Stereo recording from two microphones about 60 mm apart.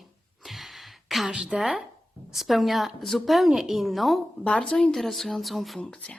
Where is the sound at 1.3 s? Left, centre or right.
Centre.